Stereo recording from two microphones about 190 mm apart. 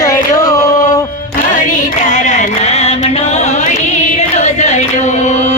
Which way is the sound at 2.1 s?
40° left (ahead or behind).